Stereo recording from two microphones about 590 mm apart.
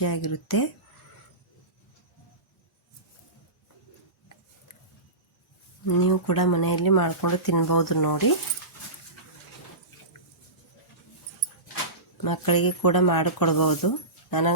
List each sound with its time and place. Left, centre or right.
0.0 s speech: left
6.0 s speech: left
12.1 s speech: left